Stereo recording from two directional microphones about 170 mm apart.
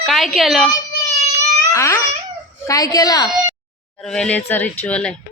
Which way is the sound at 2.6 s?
20° left (ahead or behind).